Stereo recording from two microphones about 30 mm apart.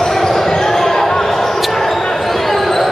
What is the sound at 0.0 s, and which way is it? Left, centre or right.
Basketball bounce, centre.